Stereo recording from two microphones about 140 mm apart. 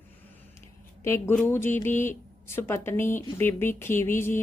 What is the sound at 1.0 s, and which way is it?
A woman's voice, 20° left (ahead or behind).